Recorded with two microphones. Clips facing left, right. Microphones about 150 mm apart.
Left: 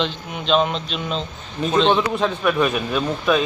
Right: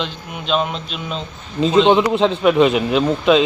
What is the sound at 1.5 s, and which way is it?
A man's voice, 20° right (ahead or behind).